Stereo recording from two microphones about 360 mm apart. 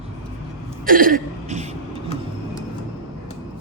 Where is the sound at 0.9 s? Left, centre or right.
Right.